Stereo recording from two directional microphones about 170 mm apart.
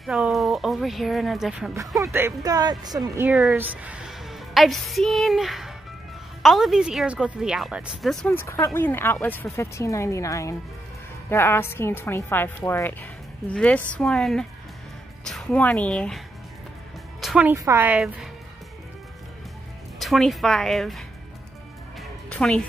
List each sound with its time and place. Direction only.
0.0 s speech: centre (ahead or behind)
2.0 s speech: 15° right (ahead or behind)
3.3 s a woman's voice: centre (ahead or behind)
8.4 s a woman's voice: 15° left (ahead or behind)
17.2 s music: centre (ahead or behind)
17.5 s speech: 15° right (ahead or behind)
20.0 s speech: centre (ahead or behind)
22.3 s music: 5° left (ahead or behind)